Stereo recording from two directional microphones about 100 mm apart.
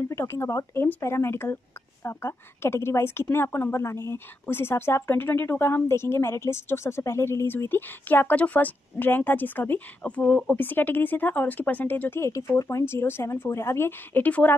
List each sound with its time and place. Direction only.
0.1 s speech: 25° left (ahead or behind)